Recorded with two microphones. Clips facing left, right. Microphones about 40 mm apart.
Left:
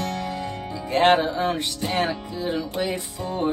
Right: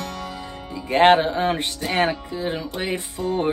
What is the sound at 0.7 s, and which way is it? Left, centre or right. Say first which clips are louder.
Music: right 3 dB; right.